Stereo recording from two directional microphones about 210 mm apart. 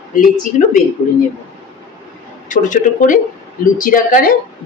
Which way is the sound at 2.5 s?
40° left (ahead or behind).